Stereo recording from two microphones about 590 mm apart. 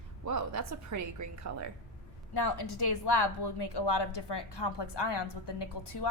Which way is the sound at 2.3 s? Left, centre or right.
Left.